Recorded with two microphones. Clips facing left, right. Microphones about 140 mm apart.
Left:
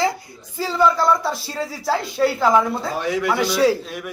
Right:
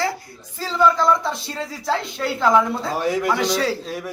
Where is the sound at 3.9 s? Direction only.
35° right (ahead or behind).